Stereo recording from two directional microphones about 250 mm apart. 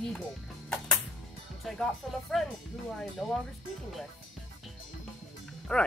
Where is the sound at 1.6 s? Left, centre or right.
Centre.